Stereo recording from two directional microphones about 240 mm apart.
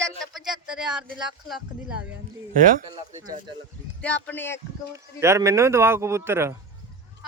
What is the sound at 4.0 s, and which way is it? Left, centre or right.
Speech, centre.